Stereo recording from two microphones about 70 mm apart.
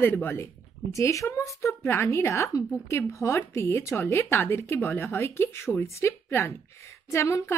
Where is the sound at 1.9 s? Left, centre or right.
Left.